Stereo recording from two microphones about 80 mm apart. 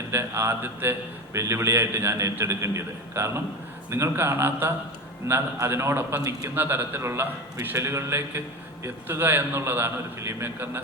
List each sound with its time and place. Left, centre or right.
0.1 s a man's voice: right